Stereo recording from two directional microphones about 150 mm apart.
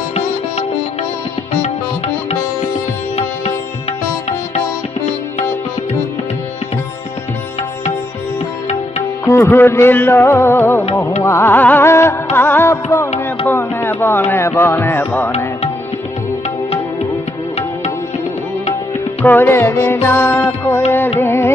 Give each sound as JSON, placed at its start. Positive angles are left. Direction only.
{"t": 9.2, "sound": "music", "side_deg": 20}
{"t": 19.2, "sound": "music", "side_deg": 15}